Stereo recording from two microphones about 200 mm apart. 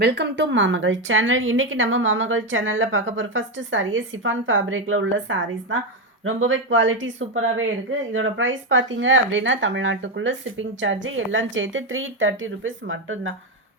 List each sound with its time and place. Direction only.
0.0 s a woman's voice: 60° right (ahead or behind); by 13.3 s 80° right